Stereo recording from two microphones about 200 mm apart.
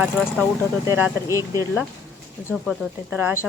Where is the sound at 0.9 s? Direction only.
10° right (ahead or behind).